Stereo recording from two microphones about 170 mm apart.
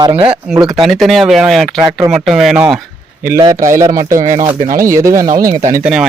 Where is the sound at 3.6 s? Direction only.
50° right (ahead or behind).